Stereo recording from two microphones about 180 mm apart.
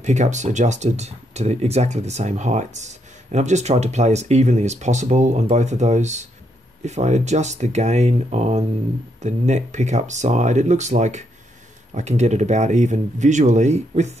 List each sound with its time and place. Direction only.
0.0 s speech: 40° right (ahead or behind)